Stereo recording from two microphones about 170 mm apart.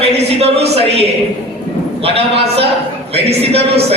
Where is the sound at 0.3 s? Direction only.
35° right (ahead or behind).